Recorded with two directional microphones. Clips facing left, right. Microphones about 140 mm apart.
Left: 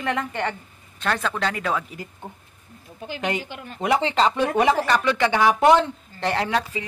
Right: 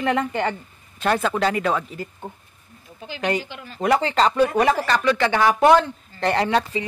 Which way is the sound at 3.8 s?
20° left (ahead or behind).